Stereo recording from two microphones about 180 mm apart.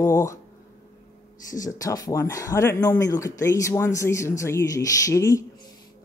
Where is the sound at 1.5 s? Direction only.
20° left (ahead or behind).